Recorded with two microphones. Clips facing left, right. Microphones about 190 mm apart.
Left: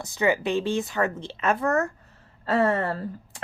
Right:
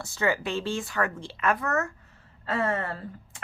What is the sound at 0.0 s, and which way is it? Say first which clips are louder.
Speech: left 4 dB; 15° left (ahead or behind).